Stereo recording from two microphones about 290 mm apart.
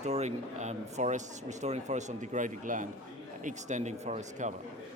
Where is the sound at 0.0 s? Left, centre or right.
Right.